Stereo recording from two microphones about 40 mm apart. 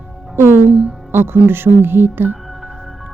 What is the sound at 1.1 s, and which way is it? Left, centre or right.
Speech, right.